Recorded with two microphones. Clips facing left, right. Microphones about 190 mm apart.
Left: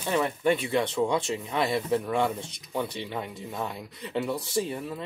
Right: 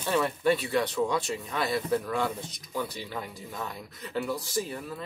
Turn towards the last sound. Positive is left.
turn(degrees=25)  # may be behind; listen again after turning